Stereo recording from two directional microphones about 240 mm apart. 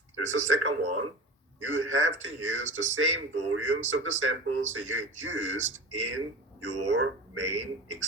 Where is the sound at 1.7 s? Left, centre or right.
Right.